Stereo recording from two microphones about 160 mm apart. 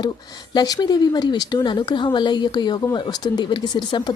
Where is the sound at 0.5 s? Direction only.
25° left (ahead or behind).